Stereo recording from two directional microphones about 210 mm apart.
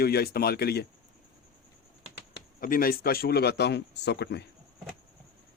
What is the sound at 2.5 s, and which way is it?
Speech, 40° left (ahead or behind).